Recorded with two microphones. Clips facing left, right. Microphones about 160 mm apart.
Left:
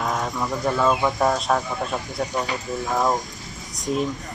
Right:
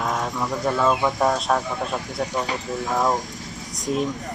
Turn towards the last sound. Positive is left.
turn(degrees=0)  # may be behind; listen again after turning